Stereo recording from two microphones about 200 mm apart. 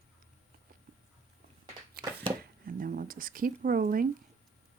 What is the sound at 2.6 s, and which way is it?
Speech, 45° right (ahead or behind).